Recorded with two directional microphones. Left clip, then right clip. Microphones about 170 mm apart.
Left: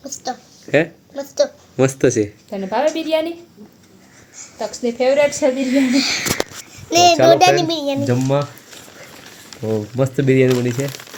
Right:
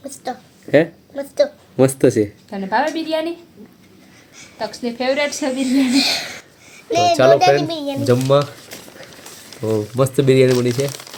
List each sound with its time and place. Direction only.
0.3 s a sound: 15° right (ahead or behind)
2.5 s a woman's voice: 65° left (ahead or behind)
4.5 s a woman's voice: 60° left (ahead or behind)
5.9 s speech: 75° right (ahead or behind)
6.9 s child singing: 85° left
7.3 s child singing: 65° left (ahead or behind)
8.0 s speech: 20° right (ahead or behind)
9.6 s speech: 25° right (ahead or behind)